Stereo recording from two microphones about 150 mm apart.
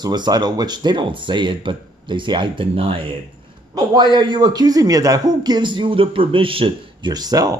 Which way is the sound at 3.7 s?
30° right (ahead or behind).